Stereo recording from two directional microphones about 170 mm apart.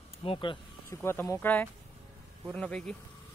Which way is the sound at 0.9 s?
15° left (ahead or behind).